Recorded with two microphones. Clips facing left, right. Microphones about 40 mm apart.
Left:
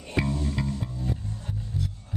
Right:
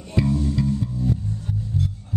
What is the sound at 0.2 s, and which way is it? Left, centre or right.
Music, left.